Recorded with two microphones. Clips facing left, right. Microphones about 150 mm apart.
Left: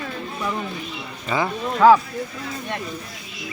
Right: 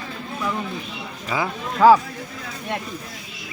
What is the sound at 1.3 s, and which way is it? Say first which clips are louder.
Speech: left 2 dB; 5° right (ahead or behind).